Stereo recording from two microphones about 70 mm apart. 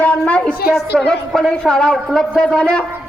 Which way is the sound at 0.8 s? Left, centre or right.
Centre.